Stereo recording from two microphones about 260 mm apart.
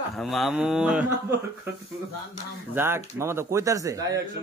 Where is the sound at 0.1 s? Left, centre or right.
Centre.